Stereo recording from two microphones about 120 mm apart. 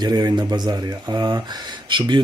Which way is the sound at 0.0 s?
35° right (ahead or behind).